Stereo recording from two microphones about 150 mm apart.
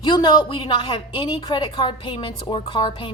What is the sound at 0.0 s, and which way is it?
A woman's voice, 30° left (ahead or behind).